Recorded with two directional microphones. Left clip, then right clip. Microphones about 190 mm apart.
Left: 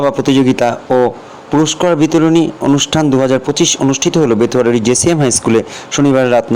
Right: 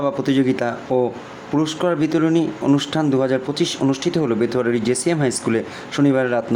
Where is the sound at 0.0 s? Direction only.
30° left (ahead or behind).